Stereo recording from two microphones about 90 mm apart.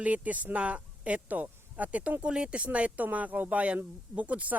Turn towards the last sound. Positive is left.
turn(degrees=-15)  # may be behind; listen again after turning